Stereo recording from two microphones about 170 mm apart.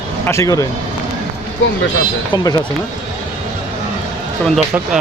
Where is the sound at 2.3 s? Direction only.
20° left (ahead or behind).